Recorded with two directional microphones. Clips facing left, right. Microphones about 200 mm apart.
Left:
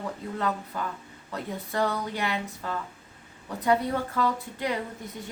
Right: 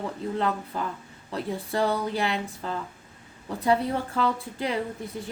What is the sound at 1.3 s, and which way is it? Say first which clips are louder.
Speech: right 4 dB; 30° right (ahead or behind).